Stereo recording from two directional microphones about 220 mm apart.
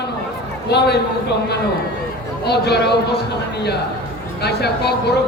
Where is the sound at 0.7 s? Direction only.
50° left (ahead or behind).